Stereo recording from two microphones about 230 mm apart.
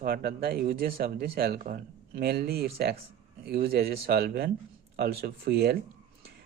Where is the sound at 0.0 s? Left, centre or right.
Right.